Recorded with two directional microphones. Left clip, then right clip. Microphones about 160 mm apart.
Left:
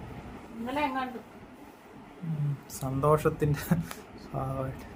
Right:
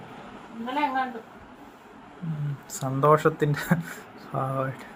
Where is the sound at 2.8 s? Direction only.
15° right (ahead or behind).